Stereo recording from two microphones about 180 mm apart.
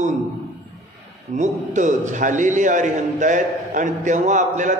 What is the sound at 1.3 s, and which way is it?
A man's voice, 40° right (ahead or behind).